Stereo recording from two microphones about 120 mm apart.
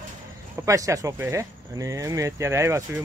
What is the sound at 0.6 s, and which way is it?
Speech, 25° right (ahead or behind).